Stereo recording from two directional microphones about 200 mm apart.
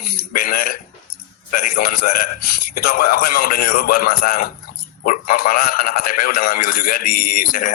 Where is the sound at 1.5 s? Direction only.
45° left (ahead or behind).